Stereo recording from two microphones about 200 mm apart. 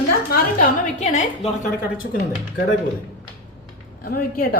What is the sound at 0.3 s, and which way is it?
Speech, 50° left (ahead or behind).